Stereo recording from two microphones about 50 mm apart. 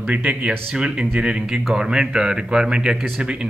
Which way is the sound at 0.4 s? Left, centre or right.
Centre.